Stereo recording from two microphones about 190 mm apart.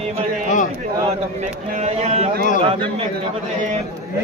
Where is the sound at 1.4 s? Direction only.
35° right (ahead or behind).